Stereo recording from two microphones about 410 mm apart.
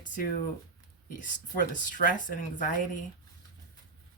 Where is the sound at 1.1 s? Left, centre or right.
Centre.